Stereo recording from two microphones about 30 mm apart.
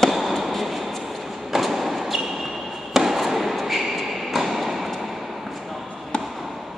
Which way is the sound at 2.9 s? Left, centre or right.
Centre.